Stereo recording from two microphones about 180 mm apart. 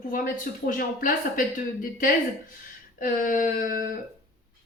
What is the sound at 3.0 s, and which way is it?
Speech, 50° left (ahead or behind).